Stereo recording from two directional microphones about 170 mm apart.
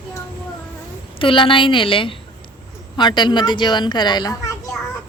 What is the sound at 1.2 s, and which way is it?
A child's voice, 30° left (ahead or behind).